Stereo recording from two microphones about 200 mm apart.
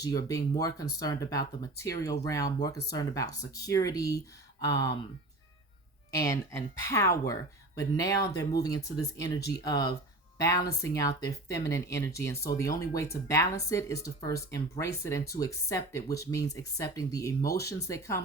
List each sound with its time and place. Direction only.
0.0 s speech: 15° left (ahead or behind)
6.1 s speech: 15° left (ahead or behind)